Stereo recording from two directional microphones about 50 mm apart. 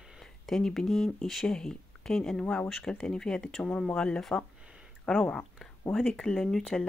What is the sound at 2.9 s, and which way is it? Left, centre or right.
Speech, centre.